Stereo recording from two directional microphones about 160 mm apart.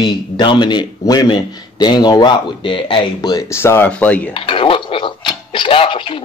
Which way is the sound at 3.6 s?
15° left (ahead or behind).